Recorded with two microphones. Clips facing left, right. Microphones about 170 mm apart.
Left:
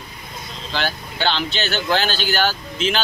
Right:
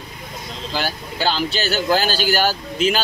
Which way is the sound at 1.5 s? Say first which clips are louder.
Right 2 dB; 40° right (ahead or behind).